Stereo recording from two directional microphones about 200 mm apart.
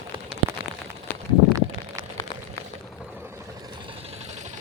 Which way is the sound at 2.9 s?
5° right (ahead or behind).